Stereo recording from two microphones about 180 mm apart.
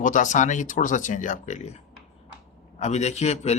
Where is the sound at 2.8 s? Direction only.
40° left (ahead or behind).